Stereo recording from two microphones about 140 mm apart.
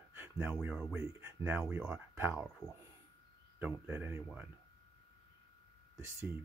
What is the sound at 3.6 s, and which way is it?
Speech, 15° right (ahead or behind).